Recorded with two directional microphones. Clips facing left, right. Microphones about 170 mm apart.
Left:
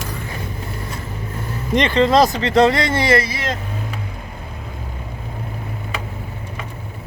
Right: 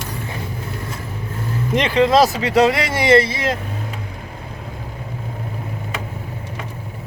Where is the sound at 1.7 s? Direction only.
5° right (ahead or behind).